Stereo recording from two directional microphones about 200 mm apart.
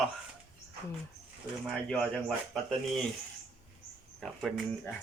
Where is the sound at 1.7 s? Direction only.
Centre (ahead or behind).